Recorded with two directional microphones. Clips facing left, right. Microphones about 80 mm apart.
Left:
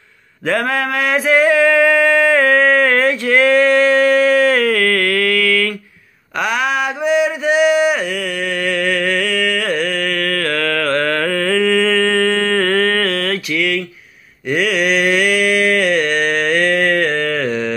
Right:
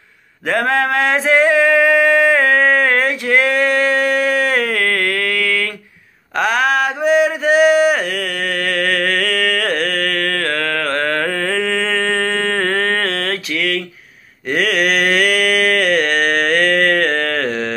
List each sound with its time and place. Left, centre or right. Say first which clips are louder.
0.5 s mantra: right 1 dB; right
6.3 s mantra: right 2 dB; right